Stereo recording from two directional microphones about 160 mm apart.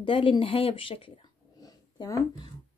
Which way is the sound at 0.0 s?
35° left (ahead or behind).